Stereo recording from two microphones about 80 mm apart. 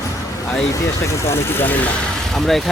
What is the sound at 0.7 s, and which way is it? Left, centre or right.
Speech, left.